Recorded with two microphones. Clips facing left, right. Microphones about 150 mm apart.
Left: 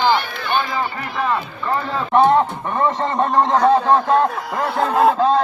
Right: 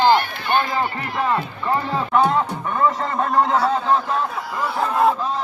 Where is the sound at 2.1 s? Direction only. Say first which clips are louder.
Left 5 dB; 30° left (ahead or behind).